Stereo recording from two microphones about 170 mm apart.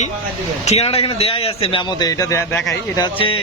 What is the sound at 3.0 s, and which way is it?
Speech, 30° left (ahead or behind).